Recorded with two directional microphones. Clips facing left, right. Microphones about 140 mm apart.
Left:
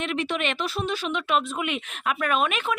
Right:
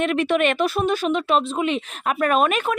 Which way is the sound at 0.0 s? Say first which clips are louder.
Right 8 dB; 55° right (ahead or behind).